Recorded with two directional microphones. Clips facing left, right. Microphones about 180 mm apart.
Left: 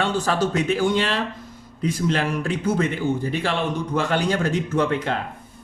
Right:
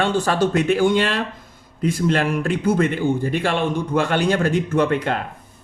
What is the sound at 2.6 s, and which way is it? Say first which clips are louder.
Speech: right 3 dB; 55° right (ahead or behind).